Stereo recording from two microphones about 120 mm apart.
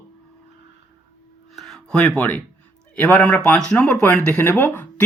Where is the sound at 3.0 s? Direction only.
10° left (ahead or behind).